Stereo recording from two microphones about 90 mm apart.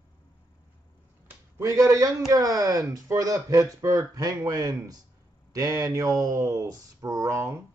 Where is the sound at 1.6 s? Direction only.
35° right (ahead or behind).